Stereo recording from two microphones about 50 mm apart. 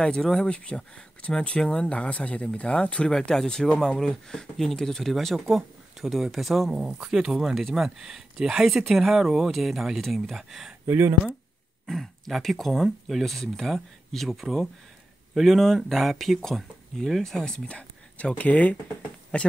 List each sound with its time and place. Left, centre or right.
0.0 s speech: centre
6.7 s speech: centre
10.9 s speech: right
11.8 s speech: centre
17.6 s speech: left